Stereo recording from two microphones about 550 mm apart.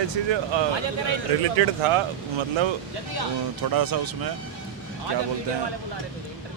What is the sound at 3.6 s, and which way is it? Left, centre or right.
Speech, right.